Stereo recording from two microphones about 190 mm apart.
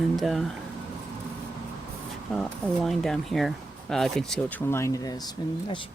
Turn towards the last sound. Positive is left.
turn(degrees=25)  # may be behind; listen again after turning